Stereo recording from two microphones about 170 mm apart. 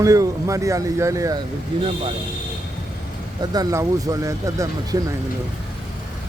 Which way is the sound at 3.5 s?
20° right (ahead or behind).